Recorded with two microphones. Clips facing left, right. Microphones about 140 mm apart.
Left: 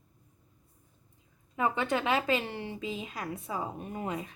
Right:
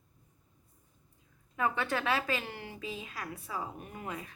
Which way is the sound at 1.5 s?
20° left (ahead or behind).